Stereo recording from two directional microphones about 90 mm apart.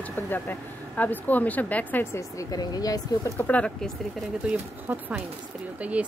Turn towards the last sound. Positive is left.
turn(degrees=-15)  # may be behind; listen again after turning